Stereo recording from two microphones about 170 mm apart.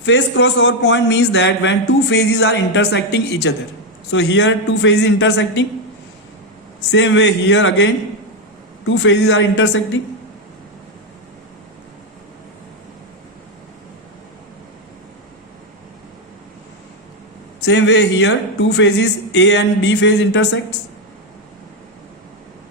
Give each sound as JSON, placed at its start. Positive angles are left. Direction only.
{"t": 0.0, "sound": "a man's voice", "side_deg": 90}
{"t": 6.9, "sound": "a man's voice", "side_deg": 90}
{"t": 9.0, "sound": "a man's voice", "side_deg": 90}
{"t": 17.7, "sound": "a man's voice", "side_deg": 90}